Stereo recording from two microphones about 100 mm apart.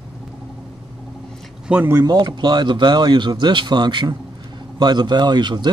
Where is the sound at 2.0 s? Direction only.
45° right (ahead or behind).